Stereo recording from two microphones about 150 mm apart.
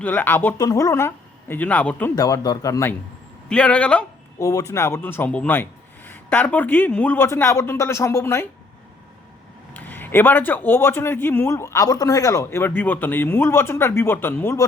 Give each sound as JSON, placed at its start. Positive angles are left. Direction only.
{"t": 0.0, "sound": "a man's voice", "side_deg": 10}
{"t": 2.1, "sound": "speech", "side_deg": 25}
{"t": 3.5, "sound": "a man's voice", "side_deg": 10}
{"t": 4.4, "sound": "a man's voice", "side_deg": 20}
{"t": 9.7, "sound": "a man's voice", "side_deg": 10}